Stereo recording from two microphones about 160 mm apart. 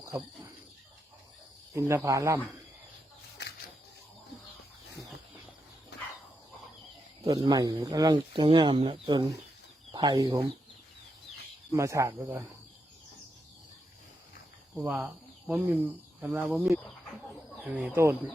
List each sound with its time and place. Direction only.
0.0 s insect: 20° right (ahead or behind)
1.7 s speech: 15° right (ahead or behind)
7.3 s speech: 30° right (ahead or behind)
11.8 s speech: 20° right (ahead or behind)
14.8 s speech: 10° right (ahead or behind)